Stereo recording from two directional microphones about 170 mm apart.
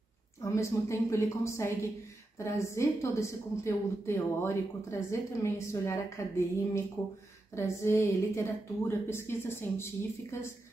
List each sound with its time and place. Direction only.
0.4 s a woman's voice: 20° left (ahead or behind)